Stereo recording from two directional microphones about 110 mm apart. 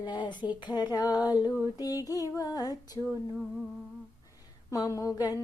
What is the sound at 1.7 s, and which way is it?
Female singing, 35° left (ahead or behind).